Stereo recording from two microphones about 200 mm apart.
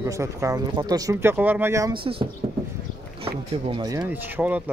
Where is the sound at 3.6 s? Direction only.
20° right (ahead or behind).